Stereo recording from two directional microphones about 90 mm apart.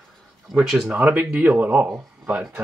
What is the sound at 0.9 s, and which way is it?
Speech, 10° right (ahead or behind).